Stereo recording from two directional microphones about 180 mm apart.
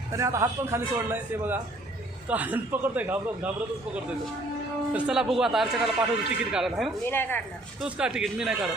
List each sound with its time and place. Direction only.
0.1 s a man's voice: 15° right (ahead or behind)
4.9 s speech: 5° right (ahead or behind)
7.0 s a woman's voice: 10° left (ahead or behind)
7.8 s speech: 5° right (ahead or behind)